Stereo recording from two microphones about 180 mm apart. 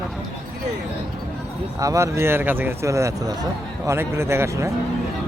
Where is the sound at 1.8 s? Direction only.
15° right (ahead or behind).